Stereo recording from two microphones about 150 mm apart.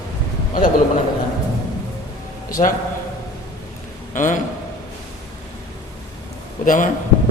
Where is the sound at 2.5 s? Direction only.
65° left (ahead or behind).